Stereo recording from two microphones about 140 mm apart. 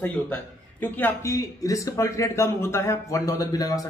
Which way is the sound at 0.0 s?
10° left (ahead or behind).